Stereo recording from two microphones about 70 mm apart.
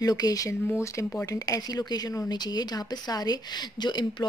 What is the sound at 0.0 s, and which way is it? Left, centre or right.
Speech, left.